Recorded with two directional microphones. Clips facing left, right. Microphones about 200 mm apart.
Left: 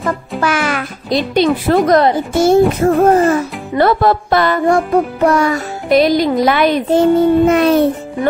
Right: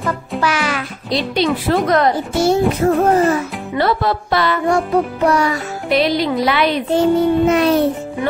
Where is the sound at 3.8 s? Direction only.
50° left (ahead or behind).